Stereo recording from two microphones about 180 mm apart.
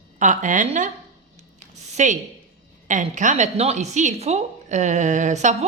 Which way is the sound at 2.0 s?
40° right (ahead or behind).